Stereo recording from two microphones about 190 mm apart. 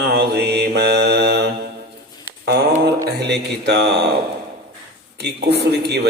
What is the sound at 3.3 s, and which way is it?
Speech, 60° right (ahead or behind).